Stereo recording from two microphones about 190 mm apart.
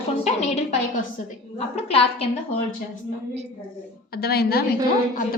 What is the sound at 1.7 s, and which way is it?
Speech, 30° left (ahead or behind).